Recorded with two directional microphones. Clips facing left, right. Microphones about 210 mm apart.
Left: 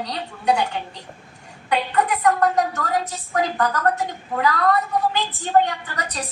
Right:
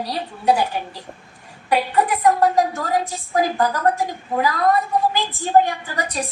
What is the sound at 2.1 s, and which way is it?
A woman's voice, 30° right (ahead or behind).